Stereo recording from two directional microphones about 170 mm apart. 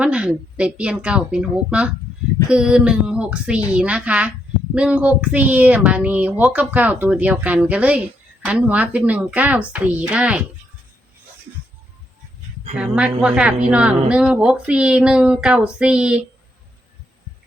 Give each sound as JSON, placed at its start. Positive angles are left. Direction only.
{"t": 0.0, "sound": "speech", "side_deg": -5}
{"t": 12.7, "sound": "a woman's voice", "side_deg": -10}